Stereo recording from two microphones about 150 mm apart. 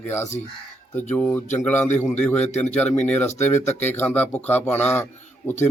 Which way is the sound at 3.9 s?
10° left (ahead or behind).